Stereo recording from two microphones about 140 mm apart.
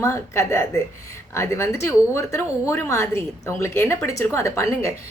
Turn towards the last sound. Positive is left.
turn(degrees=20)  # may be behind; listen again after turning